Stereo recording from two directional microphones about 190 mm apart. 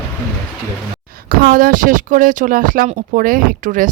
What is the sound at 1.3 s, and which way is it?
Speech, 50° right (ahead or behind).